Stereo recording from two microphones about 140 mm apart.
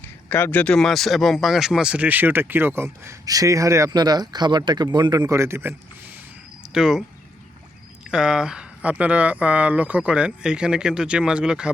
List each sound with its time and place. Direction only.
0.0 s speech: 15° left (ahead or behind); by 6.2 s 15° right (ahead or behind)
6.7 s speech: 5° right (ahead or behind)
8.0 s speech: 5° right (ahead or behind)